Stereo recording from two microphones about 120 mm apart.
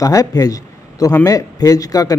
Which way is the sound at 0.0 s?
30° left (ahead or behind).